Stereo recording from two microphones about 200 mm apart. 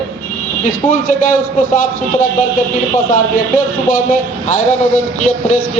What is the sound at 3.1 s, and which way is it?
Speech, 40° left (ahead or behind).